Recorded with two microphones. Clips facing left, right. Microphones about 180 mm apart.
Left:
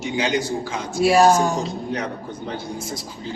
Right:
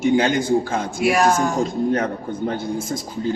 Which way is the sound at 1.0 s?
30° left (ahead or behind).